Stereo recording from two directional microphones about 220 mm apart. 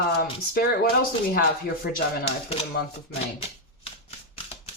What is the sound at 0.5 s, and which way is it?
Speech, 45° left (ahead or behind).